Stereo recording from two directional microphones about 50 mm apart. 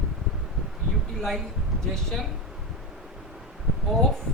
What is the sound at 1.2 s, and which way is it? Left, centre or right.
A woman's voice, centre.